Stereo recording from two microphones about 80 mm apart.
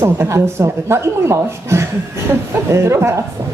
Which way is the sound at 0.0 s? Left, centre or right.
Right.